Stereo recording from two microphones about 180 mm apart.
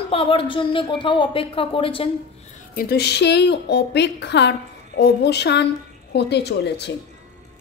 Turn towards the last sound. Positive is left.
turn(degrees=70)  # may be behind; listen again after turning